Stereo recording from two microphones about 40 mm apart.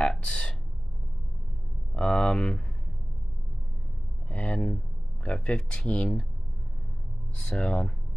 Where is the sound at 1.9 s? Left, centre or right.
Left.